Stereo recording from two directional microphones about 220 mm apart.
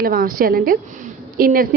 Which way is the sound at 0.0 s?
45° right (ahead or behind).